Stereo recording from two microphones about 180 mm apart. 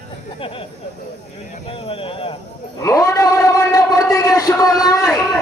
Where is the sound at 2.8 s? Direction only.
20° left (ahead or behind).